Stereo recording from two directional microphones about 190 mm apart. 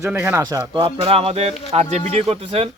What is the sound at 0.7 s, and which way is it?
Speech, 25° right (ahead or behind).